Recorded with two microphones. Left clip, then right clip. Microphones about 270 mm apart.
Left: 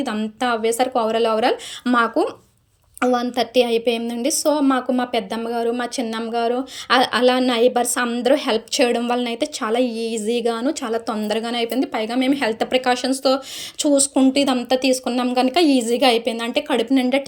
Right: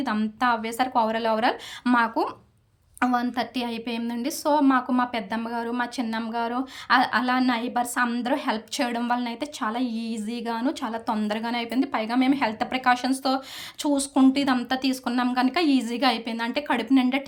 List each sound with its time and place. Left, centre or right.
0.0 s a woman's voice: centre